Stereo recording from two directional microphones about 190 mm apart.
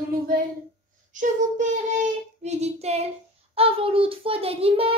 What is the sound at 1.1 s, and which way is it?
Child singing, 40° right (ahead or behind).